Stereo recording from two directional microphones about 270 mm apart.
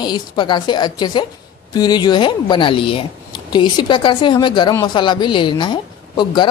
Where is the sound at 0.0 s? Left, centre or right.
Centre.